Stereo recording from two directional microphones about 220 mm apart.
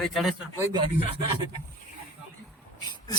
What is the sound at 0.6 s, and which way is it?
Speech, 20° right (ahead or behind).